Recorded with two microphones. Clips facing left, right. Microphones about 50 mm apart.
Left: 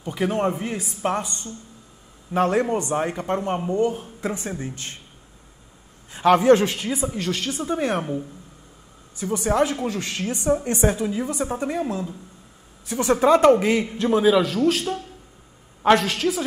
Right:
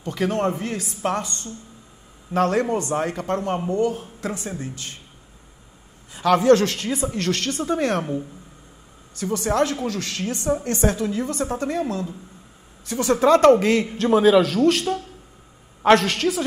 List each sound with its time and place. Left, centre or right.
0.0 s speech: centre
6.1 s a man's voice: left; by 12.2 s centre
13.0 s a man's voice: centre